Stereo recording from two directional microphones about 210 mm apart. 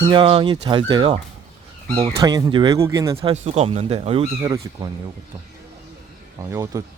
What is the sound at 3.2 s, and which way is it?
Speech, 30° right (ahead or behind).